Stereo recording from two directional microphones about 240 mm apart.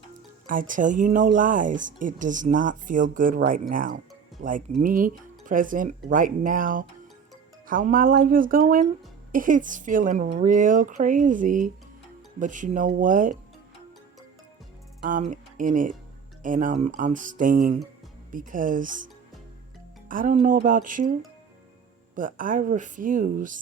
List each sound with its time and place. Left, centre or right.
0.7 s speech: right
15.0 s speech: right
20.1 s speech: right
22.1 s speech: right